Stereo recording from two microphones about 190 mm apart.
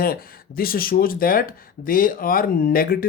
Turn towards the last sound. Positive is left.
turn(degrees=50)  # may be behind; listen again after turning